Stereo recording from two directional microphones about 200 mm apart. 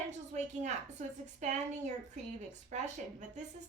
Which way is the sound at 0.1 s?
35° right (ahead or behind).